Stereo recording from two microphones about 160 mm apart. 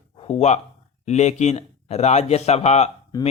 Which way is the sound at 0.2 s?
40° left (ahead or behind).